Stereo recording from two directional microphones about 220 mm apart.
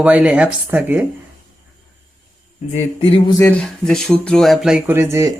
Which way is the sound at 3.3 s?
5° left (ahead or behind).